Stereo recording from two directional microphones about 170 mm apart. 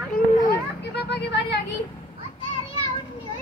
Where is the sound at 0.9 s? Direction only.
80° left.